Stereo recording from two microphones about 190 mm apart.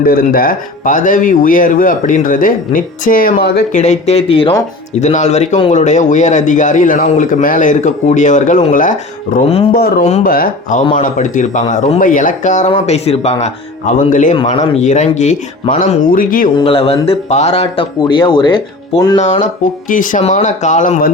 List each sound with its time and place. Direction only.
0.0 s speech: 50° left (ahead or behind)
3.7 s speech: 40° left (ahead or behind)
9.7 s speech: 50° left (ahead or behind)
16.6 s speech: 30° left (ahead or behind)
19.1 s speech: 40° left (ahead or behind)